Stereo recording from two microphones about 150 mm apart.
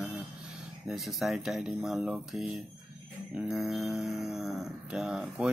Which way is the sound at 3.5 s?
Centre (ahead or behind).